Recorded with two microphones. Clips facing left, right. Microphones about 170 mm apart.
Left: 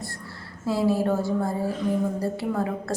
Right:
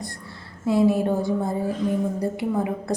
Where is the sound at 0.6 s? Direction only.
20° right (ahead or behind).